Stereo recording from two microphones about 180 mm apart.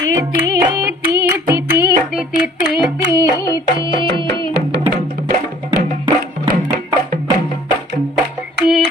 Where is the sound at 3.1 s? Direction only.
20° left (ahead or behind).